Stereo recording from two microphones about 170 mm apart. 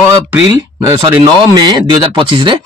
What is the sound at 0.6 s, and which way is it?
Speech, 20° right (ahead or behind).